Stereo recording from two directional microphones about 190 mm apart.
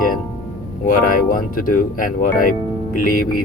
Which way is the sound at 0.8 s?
45° left (ahead or behind).